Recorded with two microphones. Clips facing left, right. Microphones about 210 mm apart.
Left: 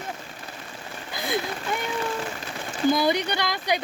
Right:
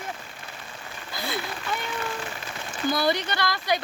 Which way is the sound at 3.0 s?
15° left (ahead or behind).